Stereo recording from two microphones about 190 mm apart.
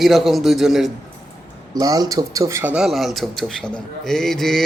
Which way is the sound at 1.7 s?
20° right (ahead or behind).